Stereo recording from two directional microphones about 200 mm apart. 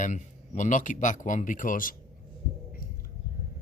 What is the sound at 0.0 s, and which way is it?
Speech, 40° left (ahead or behind).